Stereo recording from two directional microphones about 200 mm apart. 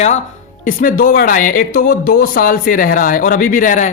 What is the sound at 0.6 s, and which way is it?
Speech, 45° left (ahead or behind).